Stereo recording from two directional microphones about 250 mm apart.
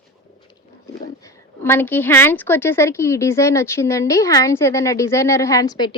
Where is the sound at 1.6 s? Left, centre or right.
Centre.